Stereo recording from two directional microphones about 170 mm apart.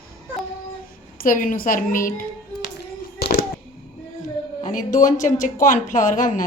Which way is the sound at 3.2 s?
70° left (ahead or behind).